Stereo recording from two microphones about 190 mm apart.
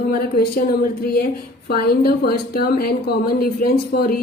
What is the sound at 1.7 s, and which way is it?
A woman's voice, 50° left (ahead or behind).